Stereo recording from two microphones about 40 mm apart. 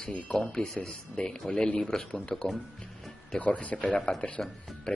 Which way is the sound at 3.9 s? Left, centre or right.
Centre.